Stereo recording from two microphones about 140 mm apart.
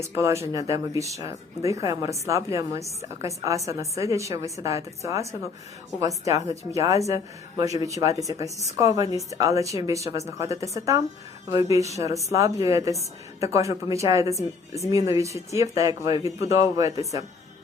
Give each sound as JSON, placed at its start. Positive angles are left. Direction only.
{"t": 0.0, "sound": "speech", "side_deg": -20}